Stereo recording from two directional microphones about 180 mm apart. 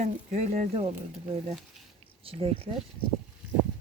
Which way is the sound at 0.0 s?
40° right (ahead or behind).